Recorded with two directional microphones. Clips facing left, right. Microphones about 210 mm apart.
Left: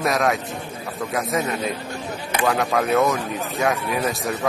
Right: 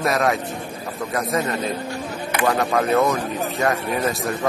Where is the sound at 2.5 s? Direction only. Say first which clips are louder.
Right 1 dB; centre (ahead or behind).